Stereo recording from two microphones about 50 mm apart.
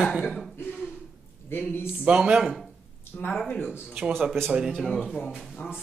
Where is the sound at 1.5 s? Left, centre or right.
Left.